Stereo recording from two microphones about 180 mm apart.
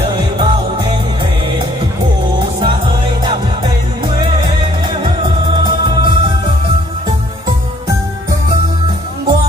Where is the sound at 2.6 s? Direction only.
30° right (ahead or behind).